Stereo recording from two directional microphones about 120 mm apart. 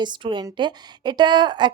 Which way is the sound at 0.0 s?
40° right (ahead or behind).